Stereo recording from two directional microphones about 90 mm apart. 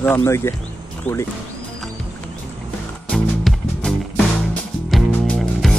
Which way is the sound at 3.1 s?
5° left (ahead or behind).